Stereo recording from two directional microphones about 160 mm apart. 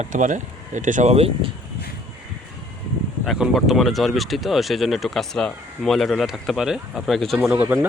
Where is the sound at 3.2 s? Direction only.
Centre (ahead or behind).